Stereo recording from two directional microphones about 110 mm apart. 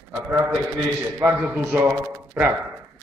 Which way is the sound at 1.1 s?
20° right (ahead or behind).